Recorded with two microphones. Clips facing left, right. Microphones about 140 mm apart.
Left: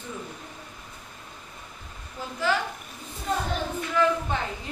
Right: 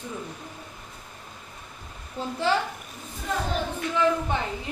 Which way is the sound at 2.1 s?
25° right (ahead or behind).